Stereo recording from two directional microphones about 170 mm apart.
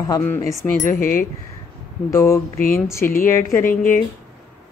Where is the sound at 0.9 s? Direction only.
55° left (ahead or behind).